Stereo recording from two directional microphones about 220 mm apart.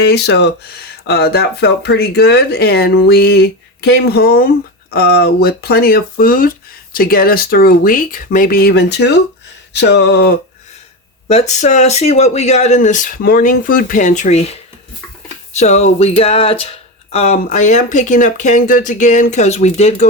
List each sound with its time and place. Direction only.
0.0 s speech: 50° left (ahead or behind)
11.3 s speech: 30° left (ahead or behind)
15.5 s a sound: 30° left (ahead or behind)
17.1 s speech: 30° left (ahead or behind)